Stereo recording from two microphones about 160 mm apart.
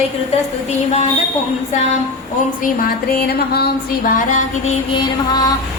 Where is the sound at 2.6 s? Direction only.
65° left (ahead or behind).